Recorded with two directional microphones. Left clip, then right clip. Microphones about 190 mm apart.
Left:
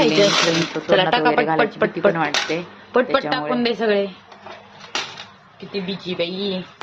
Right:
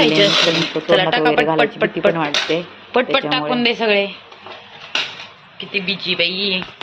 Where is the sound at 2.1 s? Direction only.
5° right (ahead or behind).